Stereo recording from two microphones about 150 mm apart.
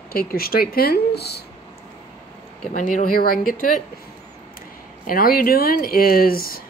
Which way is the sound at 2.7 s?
60° left (ahead or behind).